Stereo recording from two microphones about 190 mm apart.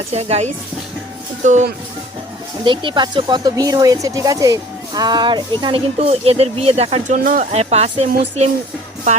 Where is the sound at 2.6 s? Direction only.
25° right (ahead or behind).